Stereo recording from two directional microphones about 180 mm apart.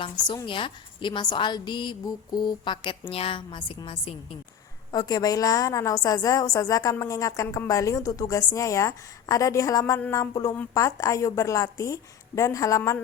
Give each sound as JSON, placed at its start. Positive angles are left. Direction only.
{"t": 0.0, "sound": "a woman's voice", "side_deg": 25}
{"t": 4.9, "sound": "a woman's voice", "side_deg": 20}